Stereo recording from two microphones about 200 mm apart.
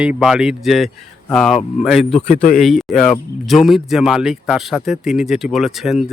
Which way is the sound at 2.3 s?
45° left (ahead or behind).